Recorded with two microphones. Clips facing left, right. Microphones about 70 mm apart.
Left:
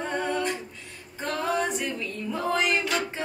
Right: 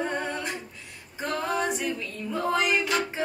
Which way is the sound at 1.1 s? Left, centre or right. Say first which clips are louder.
Left 1 dB; centre.